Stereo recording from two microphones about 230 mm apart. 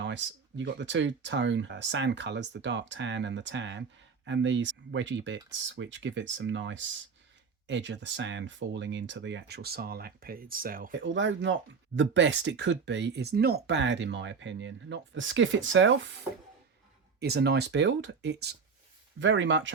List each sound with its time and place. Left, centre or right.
0.0 s speech: right
11.0 s speech: right
17.2 s speech: right